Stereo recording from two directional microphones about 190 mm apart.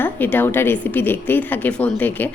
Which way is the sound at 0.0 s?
10° left (ahead or behind).